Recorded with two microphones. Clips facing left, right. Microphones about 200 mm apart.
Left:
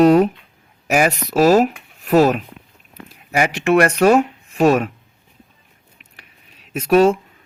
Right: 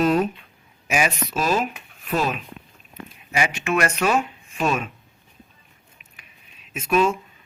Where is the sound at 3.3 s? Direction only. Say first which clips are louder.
Left 8 dB; 60° left (ahead or behind).